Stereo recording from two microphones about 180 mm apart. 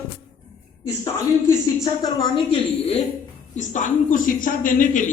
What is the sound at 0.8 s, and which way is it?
Speech, 15° left (ahead or behind).